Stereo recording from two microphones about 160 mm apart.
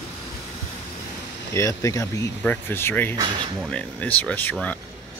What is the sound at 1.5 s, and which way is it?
Speech, 20° left (ahead or behind).